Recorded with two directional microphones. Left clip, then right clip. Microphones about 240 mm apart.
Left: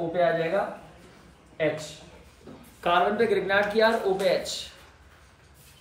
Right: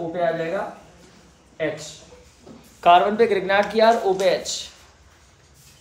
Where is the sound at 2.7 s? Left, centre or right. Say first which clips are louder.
Right 8 dB; right.